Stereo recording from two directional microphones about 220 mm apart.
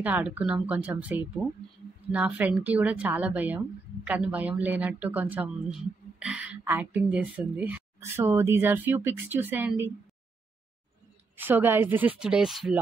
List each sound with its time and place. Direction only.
0.0 s a woman's voice: 10° right (ahead or behind)
11.3 s a woman's voice: 10° right (ahead or behind)